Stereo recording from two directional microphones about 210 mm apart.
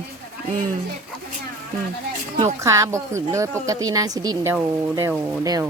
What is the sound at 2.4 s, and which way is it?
A woman's voice, 15° right (ahead or behind).